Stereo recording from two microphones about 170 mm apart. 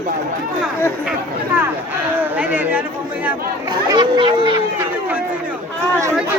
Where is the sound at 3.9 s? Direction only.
25° right (ahead or behind).